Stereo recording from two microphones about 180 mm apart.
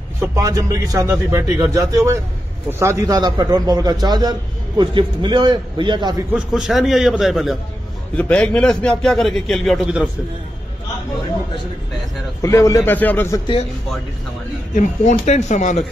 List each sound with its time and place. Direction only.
0.2 s a man's voice: 20° right (ahead or behind)
6.3 s a man's voice: 5° right (ahead or behind)
12.4 s a man's voice: 15° left (ahead or behind)
14.7 s speech: 40° left (ahead or behind)